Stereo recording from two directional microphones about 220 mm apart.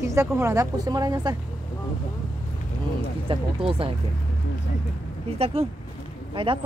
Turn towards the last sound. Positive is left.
turn(degrees=-25)  # may be behind; listen again after turning